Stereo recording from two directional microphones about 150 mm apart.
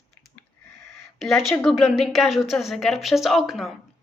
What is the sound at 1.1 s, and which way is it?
Speech, centre (ahead or behind).